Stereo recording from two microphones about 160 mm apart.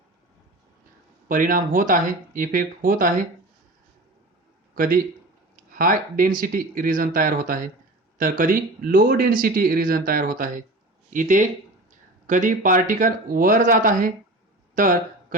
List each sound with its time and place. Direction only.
1.3 s speech: 60° right (ahead or behind)
4.7 s a man's voice: 60° right (ahead or behind)